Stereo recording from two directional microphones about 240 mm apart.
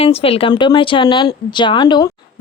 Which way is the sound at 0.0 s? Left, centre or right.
Left.